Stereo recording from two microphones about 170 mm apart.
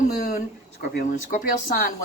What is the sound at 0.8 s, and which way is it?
Speech, 55° left (ahead or behind).